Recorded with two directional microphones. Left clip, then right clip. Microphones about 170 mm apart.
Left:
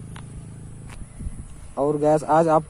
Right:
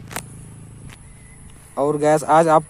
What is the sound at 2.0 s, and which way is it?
Speech, 5° right (ahead or behind).